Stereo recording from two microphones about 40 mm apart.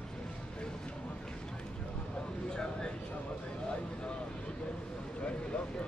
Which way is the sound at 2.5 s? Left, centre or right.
Centre.